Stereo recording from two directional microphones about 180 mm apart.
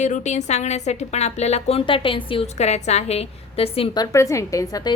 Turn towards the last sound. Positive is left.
turn(degrees=20)  # may be behind; listen again after turning